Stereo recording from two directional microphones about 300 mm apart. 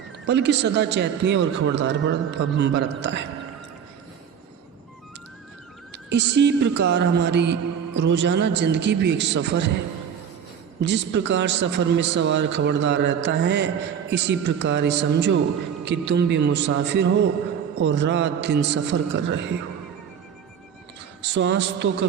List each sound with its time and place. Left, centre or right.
0.3 s speech: right
5.9 s speech: right
10.8 s speech: right
21.3 s speech: right